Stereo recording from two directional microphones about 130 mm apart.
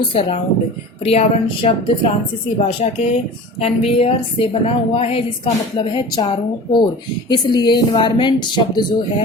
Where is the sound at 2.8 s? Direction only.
65° left (ahead or behind).